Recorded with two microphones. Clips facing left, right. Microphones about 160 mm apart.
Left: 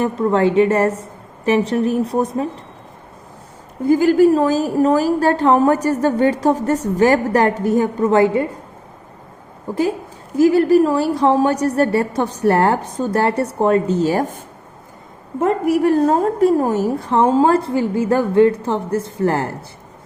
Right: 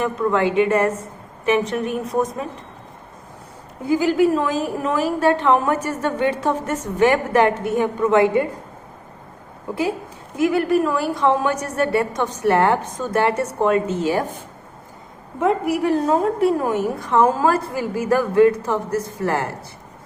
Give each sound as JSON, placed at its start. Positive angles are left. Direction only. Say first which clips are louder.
{"t": 0.0, "sound": "a woman's voice", "louder": "left 3 dB", "side_deg": 35}
{"t": 3.8, "sound": "a woman's voice", "louder": "left 5 dB", "side_deg": 45}
{"t": 10.3, "sound": "a woman's voice", "louder": "left 6 dB", "side_deg": 35}